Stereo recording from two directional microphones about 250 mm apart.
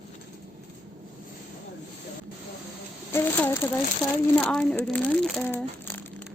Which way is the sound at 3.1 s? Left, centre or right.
Centre.